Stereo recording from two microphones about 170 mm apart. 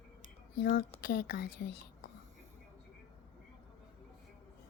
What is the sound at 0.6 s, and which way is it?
A woman's voice, 55° left (ahead or behind).